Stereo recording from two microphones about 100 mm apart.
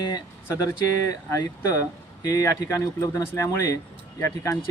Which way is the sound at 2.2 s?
35° left (ahead or behind).